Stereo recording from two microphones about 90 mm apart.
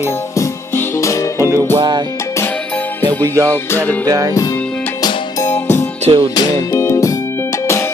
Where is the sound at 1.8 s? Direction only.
50° right (ahead or behind).